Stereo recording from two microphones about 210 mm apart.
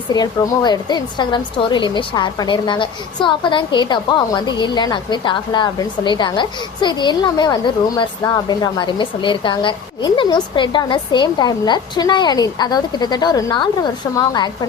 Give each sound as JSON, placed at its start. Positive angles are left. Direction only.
{"t": 0.1, "sound": "a woman's voice", "side_deg": 20}